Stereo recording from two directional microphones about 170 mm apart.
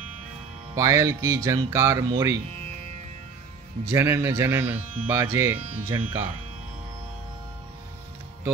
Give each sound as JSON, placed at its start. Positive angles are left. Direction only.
{"t": 0.7, "sound": "speech", "side_deg": -20}
{"t": 3.9, "sound": "speech", "side_deg": -15}